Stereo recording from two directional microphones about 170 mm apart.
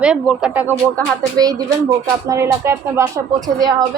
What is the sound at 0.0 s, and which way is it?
Speech, 5° right (ahead or behind).